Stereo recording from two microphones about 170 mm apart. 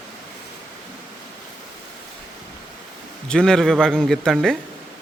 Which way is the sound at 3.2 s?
5° left (ahead or behind).